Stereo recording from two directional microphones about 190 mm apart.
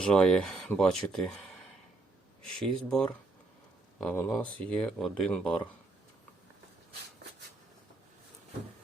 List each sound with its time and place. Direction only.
0.0 s speech: 5° left (ahead or behind)